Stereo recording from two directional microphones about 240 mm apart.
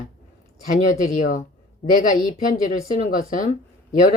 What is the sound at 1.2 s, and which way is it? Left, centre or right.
Speech, left.